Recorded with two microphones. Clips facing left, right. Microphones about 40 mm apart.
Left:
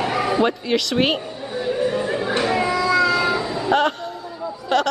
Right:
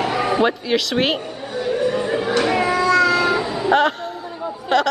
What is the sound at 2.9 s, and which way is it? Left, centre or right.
Meow, centre.